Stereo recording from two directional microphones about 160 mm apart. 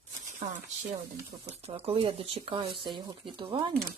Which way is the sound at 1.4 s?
40° right (ahead or behind).